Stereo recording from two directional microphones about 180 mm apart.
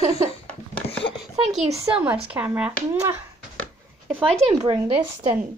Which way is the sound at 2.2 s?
10° right (ahead or behind).